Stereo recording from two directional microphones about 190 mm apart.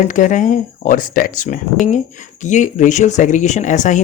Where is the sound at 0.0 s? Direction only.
45° left (ahead or behind).